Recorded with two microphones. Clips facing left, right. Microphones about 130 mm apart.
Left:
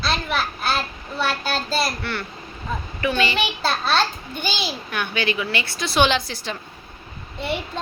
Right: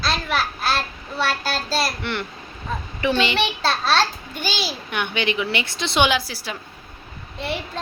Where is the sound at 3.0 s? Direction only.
25° right (ahead or behind).